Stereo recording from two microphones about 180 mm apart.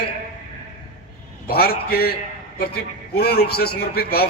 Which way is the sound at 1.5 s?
60° left (ahead or behind).